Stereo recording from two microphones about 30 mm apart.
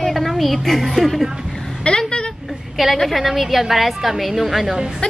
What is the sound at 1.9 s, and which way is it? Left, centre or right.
Speech, left.